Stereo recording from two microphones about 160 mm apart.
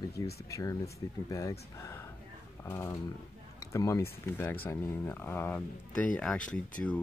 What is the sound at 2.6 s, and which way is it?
Speech, 15° left (ahead or behind).